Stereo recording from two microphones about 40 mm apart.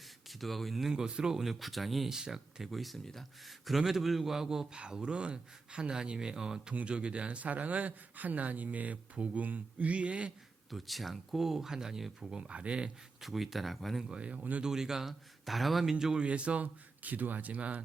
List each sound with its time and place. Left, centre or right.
0.3 s speech: centre
0.9 s speech: centre
1.5 s speech: centre; by 9.9 s right
9.9 s speech: right
10.7 s speech: centre
12.4 s speech: right
13.2 s speech: centre
14.1 s speech: right
14.6 s speech: centre
15.4 s speech: centre
15.8 s speech: centre
16.2 s speech: right